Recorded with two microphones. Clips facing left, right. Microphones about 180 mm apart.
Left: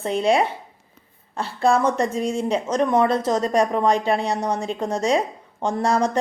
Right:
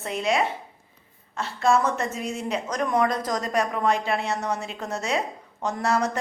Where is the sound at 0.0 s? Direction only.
30° left (ahead or behind).